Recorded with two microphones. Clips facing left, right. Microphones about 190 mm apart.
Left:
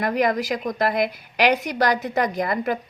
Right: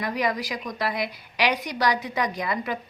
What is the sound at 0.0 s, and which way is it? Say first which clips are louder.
A woman's voice: left 5 dB; 50° left (ahead or behind).